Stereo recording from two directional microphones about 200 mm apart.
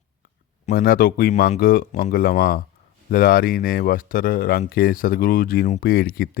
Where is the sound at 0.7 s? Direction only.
45° left (ahead or behind).